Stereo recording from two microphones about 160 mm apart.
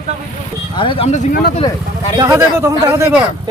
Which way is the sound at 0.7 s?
30° left (ahead or behind).